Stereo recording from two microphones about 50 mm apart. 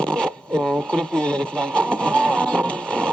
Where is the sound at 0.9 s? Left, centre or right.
Centre.